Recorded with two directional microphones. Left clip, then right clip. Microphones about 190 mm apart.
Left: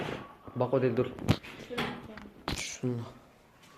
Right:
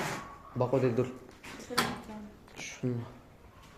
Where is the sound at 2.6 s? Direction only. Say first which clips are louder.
Right 3 dB; 20° left (ahead or behind).